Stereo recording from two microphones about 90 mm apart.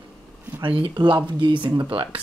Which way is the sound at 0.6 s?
75° right (ahead or behind).